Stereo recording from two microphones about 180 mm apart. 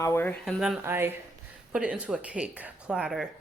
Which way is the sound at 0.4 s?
Centre (ahead or behind).